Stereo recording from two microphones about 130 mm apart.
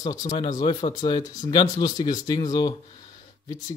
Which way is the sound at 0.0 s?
30° left (ahead or behind).